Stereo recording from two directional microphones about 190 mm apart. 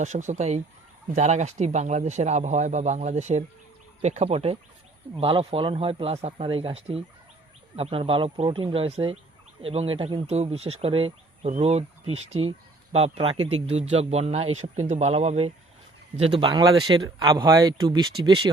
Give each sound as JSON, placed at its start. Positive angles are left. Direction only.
{"t": 0.0, "sound": "speech", "side_deg": -40}